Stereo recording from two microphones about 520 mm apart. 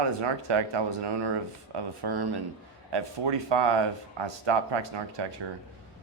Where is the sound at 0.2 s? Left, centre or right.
Right.